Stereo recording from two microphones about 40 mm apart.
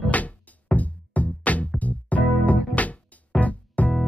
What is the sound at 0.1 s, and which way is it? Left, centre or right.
Music, left.